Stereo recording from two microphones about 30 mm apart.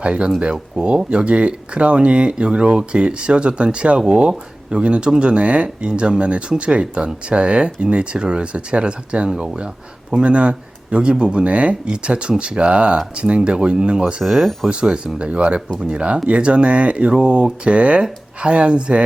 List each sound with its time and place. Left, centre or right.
0.0 s speech: right
5.6 s speech: right
14.3 s speech: centre
14.7 s speech: right